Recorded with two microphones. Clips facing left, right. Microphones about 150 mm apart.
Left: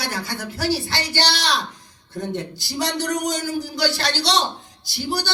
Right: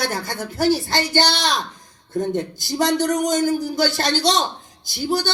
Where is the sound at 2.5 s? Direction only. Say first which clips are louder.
Right 6 dB; 50° right (ahead or behind).